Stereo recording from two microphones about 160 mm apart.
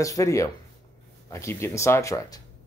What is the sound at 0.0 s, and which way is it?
Speech, 20° left (ahead or behind).